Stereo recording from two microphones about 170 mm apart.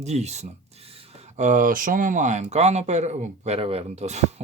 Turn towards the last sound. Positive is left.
turn(degrees=-40)  # may be behind; listen again after turning